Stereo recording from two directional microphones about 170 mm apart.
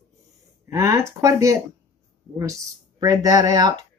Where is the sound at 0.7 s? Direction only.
15° right (ahead or behind).